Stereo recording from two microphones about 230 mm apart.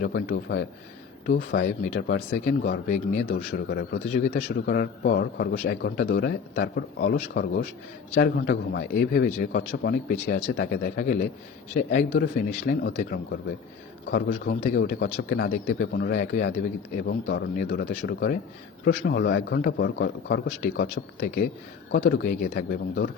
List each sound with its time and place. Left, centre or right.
0.0 s a man's voice: left
2.3 s a man's voice: left
14.1 s a man's voice: left